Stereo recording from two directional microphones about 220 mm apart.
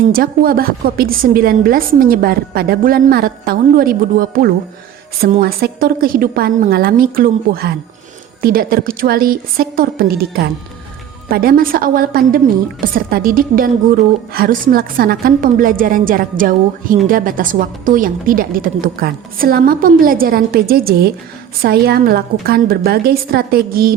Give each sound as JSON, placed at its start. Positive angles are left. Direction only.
{"t": 0.1, "sound": "a woman's voice", "side_deg": -40}